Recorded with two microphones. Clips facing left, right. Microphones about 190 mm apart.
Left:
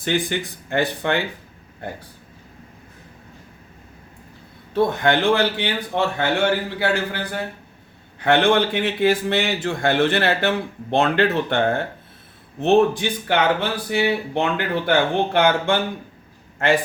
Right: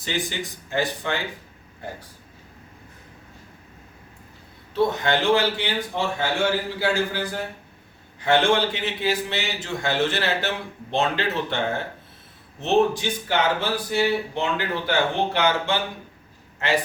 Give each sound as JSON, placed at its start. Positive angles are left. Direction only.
{"t": 0.0, "sound": "speech", "side_deg": 60}
{"t": 4.7, "sound": "speech", "side_deg": 55}